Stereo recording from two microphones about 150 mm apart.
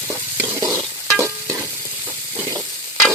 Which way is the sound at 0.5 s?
20° right (ahead or behind).